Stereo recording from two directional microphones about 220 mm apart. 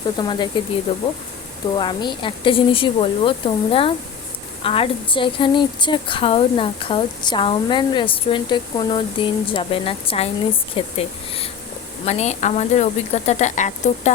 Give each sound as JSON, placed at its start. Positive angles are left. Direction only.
{"t": 0.2, "sound": "a woman's voice", "side_deg": 20}
{"t": 1.7, "sound": "a woman's voice", "side_deg": 20}